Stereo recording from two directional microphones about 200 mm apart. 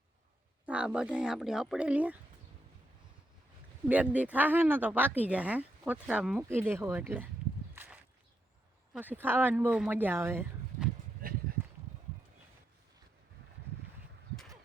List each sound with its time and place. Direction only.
0.6 s speech: 5° right (ahead or behind)
3.8 s speech: 5° right (ahead or behind)
7.8 s walk: 10° right (ahead or behind)
8.9 s speech: 10° right (ahead or behind)
11.2 s a sound: 45° right (ahead or behind)